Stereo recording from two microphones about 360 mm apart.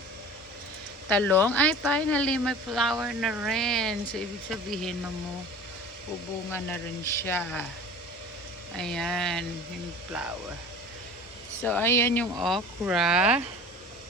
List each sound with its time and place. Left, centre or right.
1.0 s speech: centre
6.5 s speech: centre
8.7 s speech: centre
11.6 s speech: centre